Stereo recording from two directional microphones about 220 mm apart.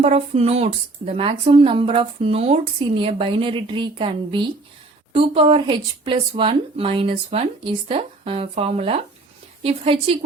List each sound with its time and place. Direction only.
0.0 s speech: 30° right (ahead or behind)